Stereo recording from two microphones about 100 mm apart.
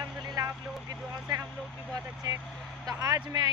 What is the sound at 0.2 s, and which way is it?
Vehicle, 40° right (ahead or behind).